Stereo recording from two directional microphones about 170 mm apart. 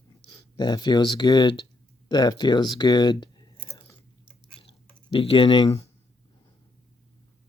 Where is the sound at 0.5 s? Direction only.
25° left (ahead or behind).